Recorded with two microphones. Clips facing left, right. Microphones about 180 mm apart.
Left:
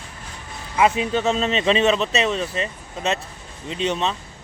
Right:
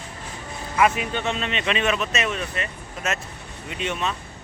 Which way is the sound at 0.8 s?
30° left (ahead or behind).